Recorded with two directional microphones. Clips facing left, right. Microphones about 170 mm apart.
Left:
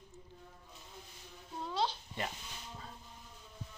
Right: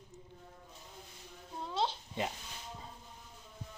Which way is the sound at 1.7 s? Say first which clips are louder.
Right 1 dB; 25° right (ahead or behind).